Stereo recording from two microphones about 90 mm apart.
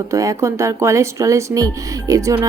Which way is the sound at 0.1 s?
35° right (ahead or behind).